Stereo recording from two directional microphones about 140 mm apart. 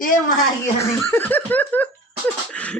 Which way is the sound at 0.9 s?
15° left (ahead or behind).